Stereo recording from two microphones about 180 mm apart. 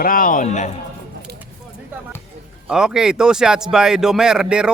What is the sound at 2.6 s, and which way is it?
A man's voice, 5° right (ahead or behind).